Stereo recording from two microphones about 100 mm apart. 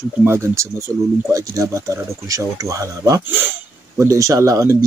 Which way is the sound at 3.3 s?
20° right (ahead or behind).